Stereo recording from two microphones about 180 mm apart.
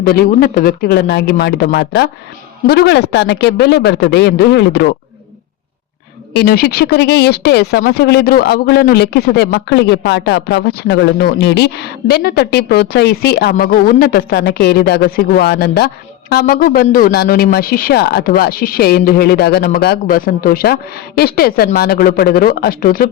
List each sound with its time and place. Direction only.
0.0 s a man's voice: 60° left (ahead or behind)
6.3 s speech: 60° left (ahead or behind)